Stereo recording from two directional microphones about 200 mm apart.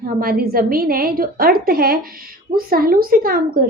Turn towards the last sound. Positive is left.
turn(degrees=-45)  # may be behind; listen again after turning